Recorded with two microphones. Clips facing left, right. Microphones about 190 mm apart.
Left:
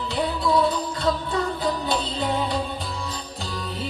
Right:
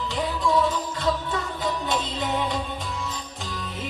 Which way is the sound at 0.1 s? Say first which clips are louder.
Left 2 dB; 35° left (ahead or behind).